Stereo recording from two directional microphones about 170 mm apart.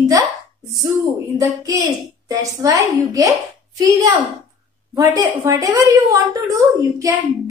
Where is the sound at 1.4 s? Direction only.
20° right (ahead or behind).